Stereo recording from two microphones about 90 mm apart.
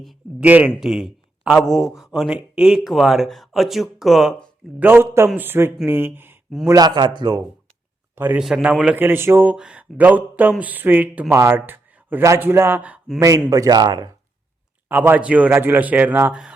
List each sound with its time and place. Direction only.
0.3 s speech: 15° right (ahead or behind)
0.8 s speech: 5° right (ahead or behind)
4.8 s a man's voice: 25° right (ahead or behind)
6.7 s a man's voice: 45° right (ahead or behind)
8.1 s a man's voice: 25° right (ahead or behind)
8.4 s speech: 5° right (ahead or behind)
9.0 s a man's voice: 25° right (ahead or behind)
9.5 s speech: 10° right (ahead or behind)
11.3 s a man's voice: 30° right (ahead or behind)
13.1 s a man's voice: 35° right (ahead or behind)
14.8 s a man's voice: 20° right (ahead or behind)
16.3 s speech: 10° right (ahead or behind)